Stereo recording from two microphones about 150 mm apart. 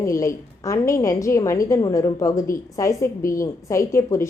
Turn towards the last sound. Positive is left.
turn(degrees=20)  # may be behind; listen again after turning